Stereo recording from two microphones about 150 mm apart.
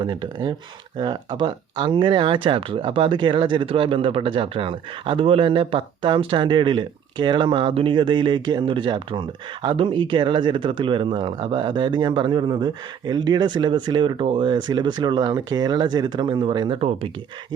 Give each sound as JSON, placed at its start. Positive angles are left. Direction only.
{"t": 0.0, "sound": "speech", "side_deg": -30}